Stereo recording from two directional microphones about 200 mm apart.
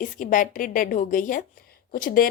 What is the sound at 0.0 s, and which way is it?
Speech, 40° left (ahead or behind).